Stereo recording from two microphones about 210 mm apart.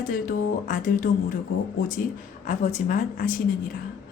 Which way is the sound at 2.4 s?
35° left (ahead or behind).